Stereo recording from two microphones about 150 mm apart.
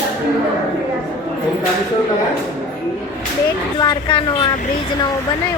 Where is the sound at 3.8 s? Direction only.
30° left (ahead or behind).